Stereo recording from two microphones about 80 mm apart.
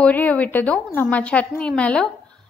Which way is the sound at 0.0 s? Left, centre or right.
Centre.